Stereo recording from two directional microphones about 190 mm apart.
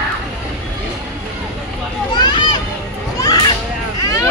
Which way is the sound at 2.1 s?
25° left (ahead or behind).